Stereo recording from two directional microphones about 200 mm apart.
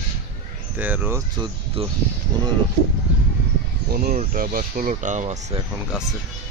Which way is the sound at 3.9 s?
45° right (ahead or behind).